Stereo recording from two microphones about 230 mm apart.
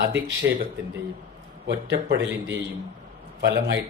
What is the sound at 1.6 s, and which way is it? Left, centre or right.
A man's voice, right.